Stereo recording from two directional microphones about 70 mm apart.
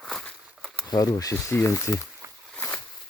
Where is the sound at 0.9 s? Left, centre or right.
Left.